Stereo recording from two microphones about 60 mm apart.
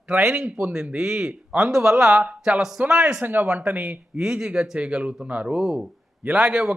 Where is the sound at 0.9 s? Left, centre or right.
Centre.